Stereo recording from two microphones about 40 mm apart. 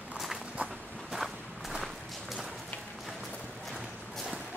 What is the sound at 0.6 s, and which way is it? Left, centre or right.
Walk, right.